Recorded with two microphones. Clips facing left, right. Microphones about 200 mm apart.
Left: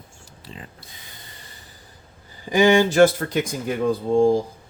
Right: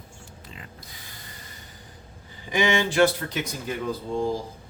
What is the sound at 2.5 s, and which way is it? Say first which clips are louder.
Speech: left 7 dB; 40° left (ahead or behind).